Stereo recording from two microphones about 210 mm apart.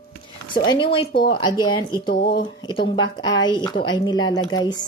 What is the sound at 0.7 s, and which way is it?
A woman's voice, 25° left (ahead or behind).